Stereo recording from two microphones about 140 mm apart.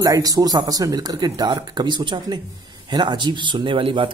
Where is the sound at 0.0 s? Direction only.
25° right (ahead or behind).